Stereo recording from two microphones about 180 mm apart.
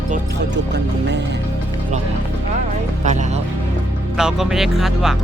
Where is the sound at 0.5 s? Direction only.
75° right (ahead or behind).